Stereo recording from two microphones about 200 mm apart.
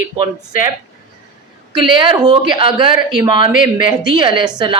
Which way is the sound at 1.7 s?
25° right (ahead or behind).